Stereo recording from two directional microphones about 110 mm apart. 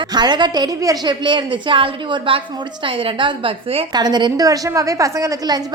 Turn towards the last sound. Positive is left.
turn(degrees=-35)  # may be behind; listen again after turning